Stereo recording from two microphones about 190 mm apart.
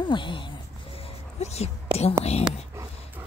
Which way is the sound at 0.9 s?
30° left (ahead or behind).